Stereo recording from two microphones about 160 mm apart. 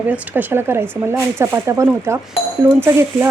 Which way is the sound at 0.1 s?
10° right (ahead or behind).